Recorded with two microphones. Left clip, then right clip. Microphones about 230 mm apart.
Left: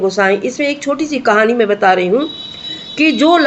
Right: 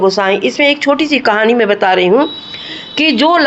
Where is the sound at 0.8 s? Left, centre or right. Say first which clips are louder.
Right 6 dB; centre.